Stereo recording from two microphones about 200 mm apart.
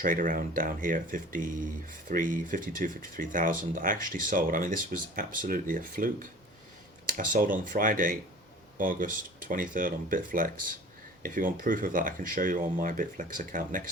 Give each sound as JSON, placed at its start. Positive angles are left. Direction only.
{"t": 0.0, "sound": "speech", "side_deg": -45}